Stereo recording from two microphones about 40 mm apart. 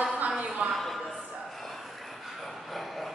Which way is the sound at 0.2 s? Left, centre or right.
Right.